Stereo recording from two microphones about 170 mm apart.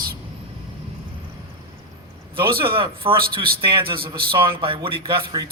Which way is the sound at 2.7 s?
30° right (ahead or behind).